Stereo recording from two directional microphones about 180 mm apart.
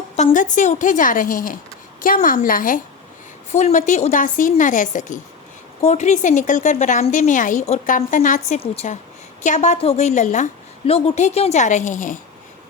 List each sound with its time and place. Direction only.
0.2 s a woman's voice: 40° left (ahead or behind)
3.5 s a woman's voice: 40° left (ahead or behind)